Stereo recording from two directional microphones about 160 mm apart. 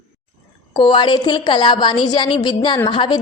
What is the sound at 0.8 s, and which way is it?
A woman's voice, 30° left (ahead or behind).